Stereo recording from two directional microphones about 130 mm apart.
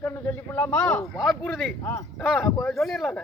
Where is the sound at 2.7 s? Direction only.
Centre (ahead or behind).